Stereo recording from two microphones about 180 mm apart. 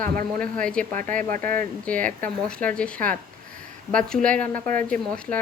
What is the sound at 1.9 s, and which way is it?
Speech, 5° left (ahead or behind).